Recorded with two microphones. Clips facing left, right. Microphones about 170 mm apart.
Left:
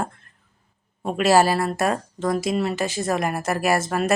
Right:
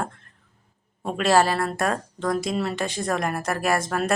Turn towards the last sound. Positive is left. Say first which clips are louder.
# left 2 dB
turn(degrees=5)  # may be behind; listen again after turning